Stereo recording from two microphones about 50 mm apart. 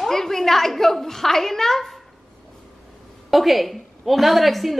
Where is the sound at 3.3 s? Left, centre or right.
Centre.